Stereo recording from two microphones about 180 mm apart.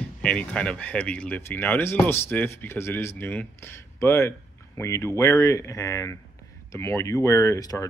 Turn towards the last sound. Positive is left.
turn(degrees=20)  # may be behind; listen again after turning